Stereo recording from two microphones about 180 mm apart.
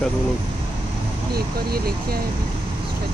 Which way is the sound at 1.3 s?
60° right (ahead or behind).